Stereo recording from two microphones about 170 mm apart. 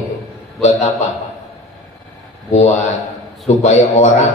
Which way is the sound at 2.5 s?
40° left (ahead or behind).